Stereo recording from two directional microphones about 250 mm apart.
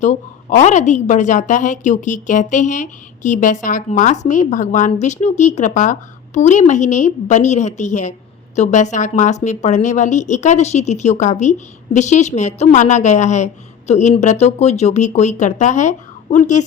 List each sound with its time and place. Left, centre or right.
0.0 s a woman's voice: left